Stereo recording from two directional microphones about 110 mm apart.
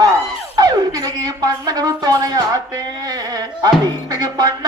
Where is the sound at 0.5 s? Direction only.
35° right (ahead or behind).